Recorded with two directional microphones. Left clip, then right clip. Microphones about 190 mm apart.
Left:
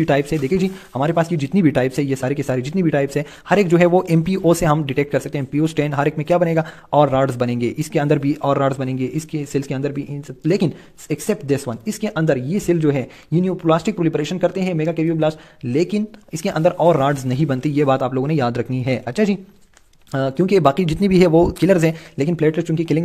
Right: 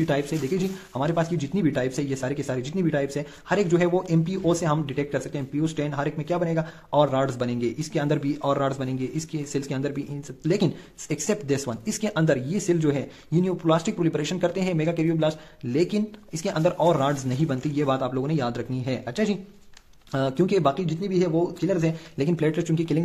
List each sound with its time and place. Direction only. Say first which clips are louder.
0.0 s speech: left 7 dB; 30° left (ahead or behind)
22.1 s speech: left 3 dB; 25° left (ahead or behind)